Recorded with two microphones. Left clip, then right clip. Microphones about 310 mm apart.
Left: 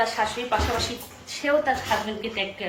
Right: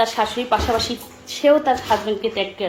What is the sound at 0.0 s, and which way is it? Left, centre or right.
A woman's voice, right.